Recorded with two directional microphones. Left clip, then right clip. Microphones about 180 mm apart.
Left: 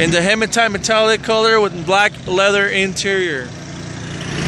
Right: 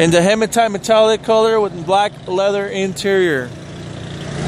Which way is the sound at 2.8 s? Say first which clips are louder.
Right 1 dB; 15° right (ahead or behind).